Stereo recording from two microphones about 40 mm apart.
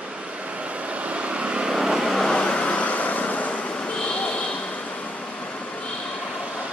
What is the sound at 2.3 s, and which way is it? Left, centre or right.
Vehicle, left.